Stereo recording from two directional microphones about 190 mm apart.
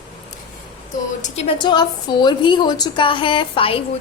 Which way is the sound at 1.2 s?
30° left (ahead or behind).